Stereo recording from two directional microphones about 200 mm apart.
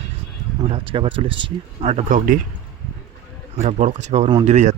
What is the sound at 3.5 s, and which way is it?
Speech, 35° right (ahead or behind).